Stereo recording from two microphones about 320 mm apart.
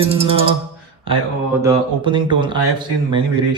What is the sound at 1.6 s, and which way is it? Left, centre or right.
A man's voice, centre.